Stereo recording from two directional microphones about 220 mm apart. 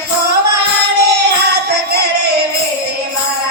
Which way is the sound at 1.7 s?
45° right (ahead or behind).